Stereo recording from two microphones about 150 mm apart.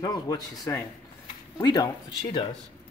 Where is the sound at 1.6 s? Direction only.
30° left (ahead or behind).